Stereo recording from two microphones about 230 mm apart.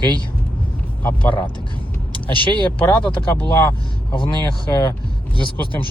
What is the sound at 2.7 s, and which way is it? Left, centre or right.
Speech, centre.